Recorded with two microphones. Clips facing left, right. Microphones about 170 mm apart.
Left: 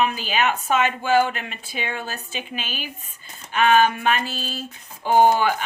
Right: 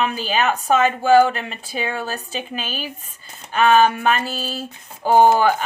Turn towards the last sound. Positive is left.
turn(degrees=-40)  # may be behind; listen again after turning